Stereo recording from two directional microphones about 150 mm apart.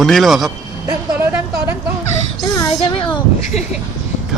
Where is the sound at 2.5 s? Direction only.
25° left (ahead or behind).